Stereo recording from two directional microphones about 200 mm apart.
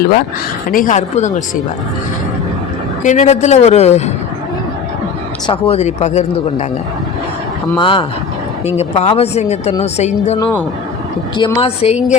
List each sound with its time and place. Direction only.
0.7 s speech: 40° left (ahead or behind)
3.0 s speech: 40° left (ahead or behind)
5.5 s speech: 30° left (ahead or behind)
7.8 s a woman's voice: 25° left (ahead or behind)
11.3 s a woman's voice: 20° left (ahead or behind)